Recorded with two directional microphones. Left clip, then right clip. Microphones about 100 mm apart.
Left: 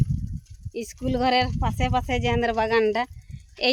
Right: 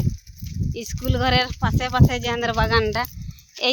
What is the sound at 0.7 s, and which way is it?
Speech, 25° left (ahead or behind).